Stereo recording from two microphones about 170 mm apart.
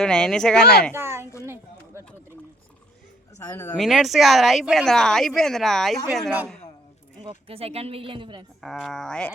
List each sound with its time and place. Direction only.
0.0 s speech: 5° left (ahead or behind)
0.6 s speech: 70° left (ahead or behind)
0.9 s a woman's voice: 15° right (ahead or behind)
1.5 s a sound: 15° right (ahead or behind)
3.3 s speech: 20° left (ahead or behind)
3.8 s speech: centre (ahead or behind)
7.2 s speech: 30° right (ahead or behind)
8.6 s speech: centre (ahead or behind)